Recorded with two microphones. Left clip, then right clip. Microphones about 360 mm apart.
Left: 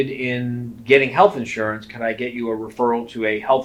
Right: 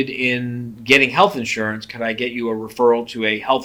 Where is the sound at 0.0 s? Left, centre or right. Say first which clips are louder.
Right 3 dB; right.